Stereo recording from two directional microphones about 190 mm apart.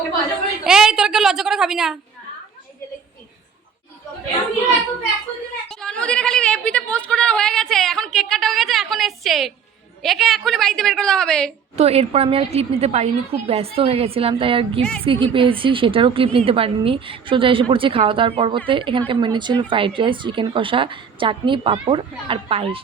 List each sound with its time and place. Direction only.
0.6 s a child's voice: 5° right (ahead or behind)
5.6 s a woman's voice: 5° left (ahead or behind)
11.8 s a woman's voice: 30° right (ahead or behind)